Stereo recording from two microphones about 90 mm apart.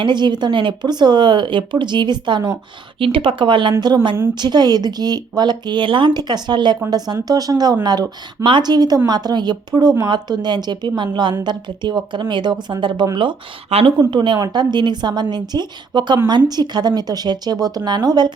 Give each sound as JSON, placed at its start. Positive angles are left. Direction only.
{"t": 0.0, "sound": "speech", "side_deg": -55}
{"t": 3.0, "sound": "a woman's voice", "side_deg": -80}
{"t": 6.9, "sound": "a woman's voice", "side_deg": -45}
{"t": 8.4, "sound": "a woman's voice", "side_deg": -55}
{"t": 14.1, "sound": "a woman's voice", "side_deg": -55}